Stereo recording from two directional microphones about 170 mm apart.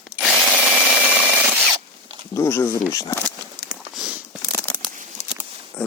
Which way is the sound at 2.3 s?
15° left (ahead or behind).